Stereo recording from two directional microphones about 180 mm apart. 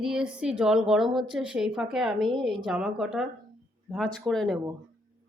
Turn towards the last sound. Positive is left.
turn(degrees=0)  # may be behind; listen again after turning